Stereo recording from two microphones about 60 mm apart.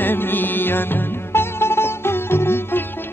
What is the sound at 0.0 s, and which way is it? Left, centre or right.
Music, left.